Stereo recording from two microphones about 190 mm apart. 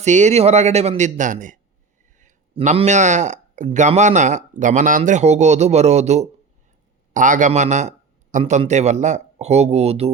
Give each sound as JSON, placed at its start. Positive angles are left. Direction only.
{"t": 0.0, "sound": "a man's voice", "side_deg": -40}